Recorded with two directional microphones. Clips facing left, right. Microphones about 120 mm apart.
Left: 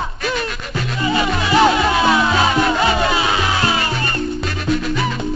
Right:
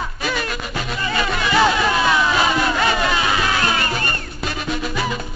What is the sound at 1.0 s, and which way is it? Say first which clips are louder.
Music: left 4 dB; 20° left (ahead or behind).